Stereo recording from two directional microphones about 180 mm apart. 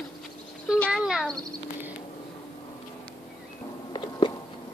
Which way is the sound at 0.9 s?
5° right (ahead or behind).